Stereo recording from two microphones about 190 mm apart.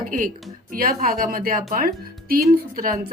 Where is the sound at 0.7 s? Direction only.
50° right (ahead or behind).